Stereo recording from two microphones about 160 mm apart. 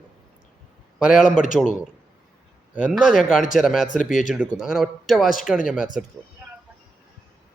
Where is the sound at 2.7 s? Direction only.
10° right (ahead or behind).